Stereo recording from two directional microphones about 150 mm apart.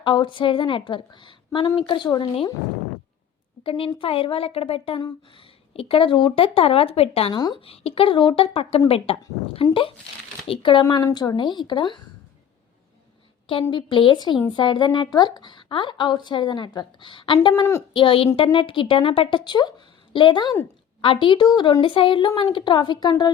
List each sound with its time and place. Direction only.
0.0 s speech: 30° left (ahead or behind)
3.6 s speech: 35° left (ahead or behind)
7.3 s speech: 30° left (ahead or behind)
13.5 s speech: 35° left (ahead or behind)